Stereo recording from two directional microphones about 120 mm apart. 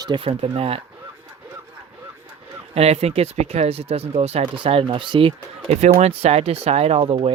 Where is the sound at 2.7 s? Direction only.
60° right (ahead or behind).